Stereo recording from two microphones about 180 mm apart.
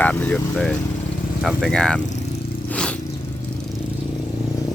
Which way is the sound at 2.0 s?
40° left (ahead or behind).